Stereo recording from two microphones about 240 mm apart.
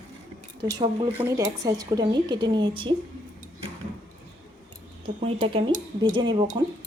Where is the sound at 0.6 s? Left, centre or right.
Centre.